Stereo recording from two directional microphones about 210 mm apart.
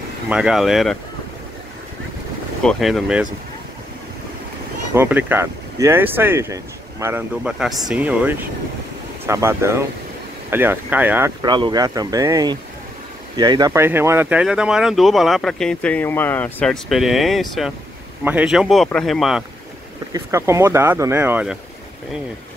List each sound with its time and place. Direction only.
0.3 s speech: 5° right (ahead or behind)
2.6 s speech: centre (ahead or behind)
4.9 s speech: 10° right (ahead or behind)
11.4 s speech: 20° right (ahead or behind); by 19.4 s centre (ahead or behind)
20.1 s speech: 15° right (ahead or behind)